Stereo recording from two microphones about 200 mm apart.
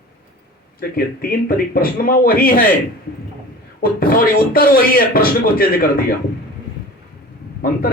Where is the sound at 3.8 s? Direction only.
50° left (ahead or behind).